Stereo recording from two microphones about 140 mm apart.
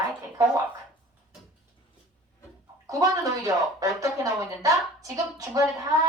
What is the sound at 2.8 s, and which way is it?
Speech, 25° right (ahead or behind).